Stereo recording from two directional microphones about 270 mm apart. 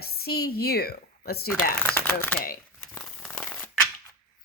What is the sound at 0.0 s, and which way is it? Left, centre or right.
A woman's voice, left.